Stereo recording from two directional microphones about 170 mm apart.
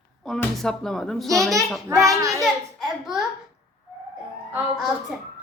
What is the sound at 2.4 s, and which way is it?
Speech, centre (ahead or behind).